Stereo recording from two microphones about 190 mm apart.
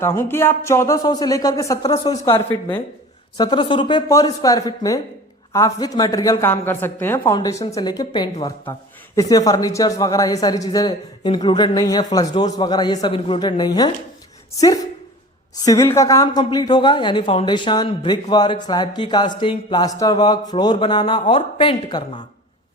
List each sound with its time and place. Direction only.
0.0 s a woman's voice: 15° left (ahead or behind)